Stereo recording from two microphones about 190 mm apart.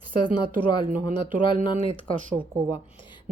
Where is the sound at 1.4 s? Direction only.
25° left (ahead or behind).